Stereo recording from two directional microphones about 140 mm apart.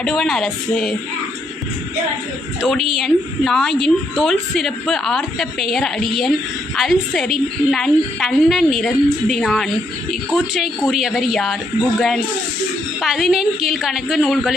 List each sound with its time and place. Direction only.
0.0 s a woman's voice: 5° left (ahead or behind)
2.6 s a woman's voice: centre (ahead or behind)